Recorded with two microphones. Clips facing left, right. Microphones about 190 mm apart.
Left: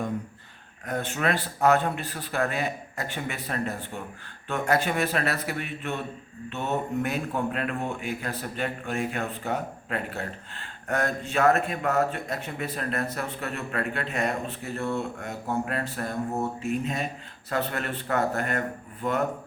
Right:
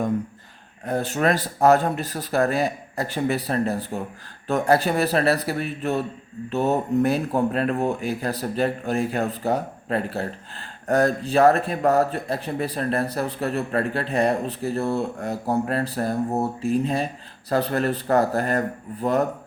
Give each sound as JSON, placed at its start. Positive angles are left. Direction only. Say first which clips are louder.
{"t": 0.9, "sound": "speech", "louder": "right 6 dB", "side_deg": -35}